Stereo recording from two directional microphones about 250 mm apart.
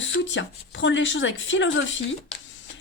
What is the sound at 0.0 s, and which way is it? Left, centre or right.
Speech, left.